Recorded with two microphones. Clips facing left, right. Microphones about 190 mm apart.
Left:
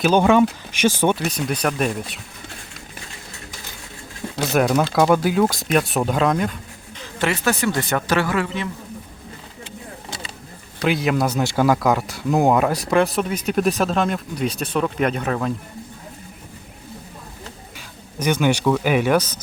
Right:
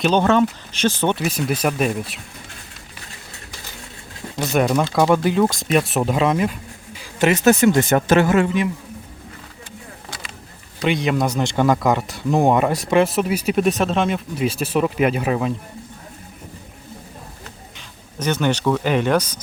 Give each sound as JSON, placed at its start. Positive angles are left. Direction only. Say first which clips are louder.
{"t": 0.0, "sound": "speech", "louder": "left 1 dB", "side_deg": 10}
{"t": 1.1, "sound": "speech", "louder": "right 2 dB", "side_deg": -5}
{"t": 4.4, "sound": "speech", "louder": "even", "side_deg": 0}
{"t": 7.0, "sound": "a sound", "louder": "right 5 dB", "side_deg": -20}
{"t": 7.4, "sound": "speech", "louder": "right 7 dB", "side_deg": -20}
{"t": 10.8, "sound": "speech", "louder": "even", "side_deg": 0}
{"t": 17.7, "sound": "speech", "louder": "left 1 dB", "side_deg": 10}